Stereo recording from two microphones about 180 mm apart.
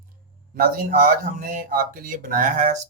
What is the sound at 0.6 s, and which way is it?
Speech, 50° right (ahead or behind).